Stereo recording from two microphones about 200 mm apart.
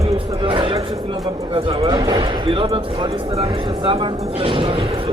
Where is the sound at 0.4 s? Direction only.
25° right (ahead or behind).